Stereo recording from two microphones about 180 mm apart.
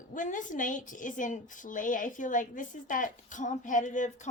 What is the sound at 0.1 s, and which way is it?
A woman's voice, 45° left (ahead or behind).